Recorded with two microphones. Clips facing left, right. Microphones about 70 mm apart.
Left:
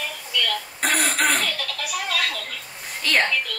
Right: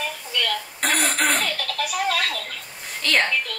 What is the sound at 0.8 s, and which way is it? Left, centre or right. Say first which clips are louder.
Throat clearing: even; centre.